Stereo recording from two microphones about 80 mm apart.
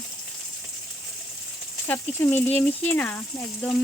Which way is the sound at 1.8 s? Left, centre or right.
Left.